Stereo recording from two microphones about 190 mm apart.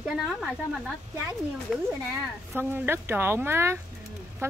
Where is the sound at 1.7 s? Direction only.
Centre (ahead or behind).